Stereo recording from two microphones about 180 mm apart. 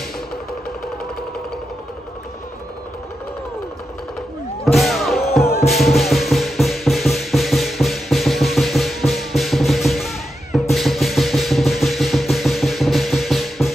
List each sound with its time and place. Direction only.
4.7 s music: centre (ahead or behind)